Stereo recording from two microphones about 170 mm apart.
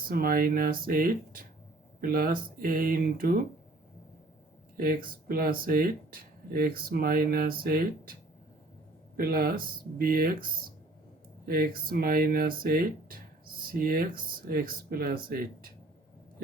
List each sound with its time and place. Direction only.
0.0 s speech: 60° right (ahead or behind)
5.0 s speech: 60° right (ahead or behind)
9.1 s speech: 60° right (ahead or behind)